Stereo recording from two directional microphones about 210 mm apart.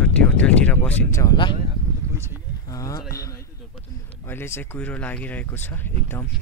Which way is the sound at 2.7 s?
15° left (ahead or behind).